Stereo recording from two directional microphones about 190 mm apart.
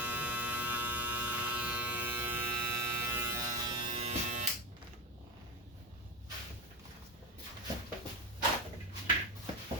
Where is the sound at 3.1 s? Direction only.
15° right (ahead or behind).